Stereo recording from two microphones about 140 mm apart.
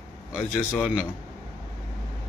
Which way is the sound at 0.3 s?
15° left (ahead or behind).